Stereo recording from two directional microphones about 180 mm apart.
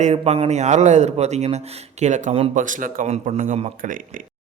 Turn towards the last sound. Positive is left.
turn(degrees=-45)  # may be behind; listen again after turning